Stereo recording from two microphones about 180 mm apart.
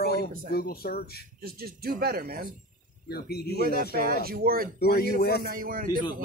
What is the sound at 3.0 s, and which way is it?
Speech, 60° left (ahead or behind).